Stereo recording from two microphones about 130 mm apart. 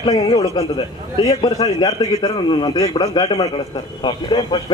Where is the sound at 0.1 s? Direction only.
30° left (ahead or behind).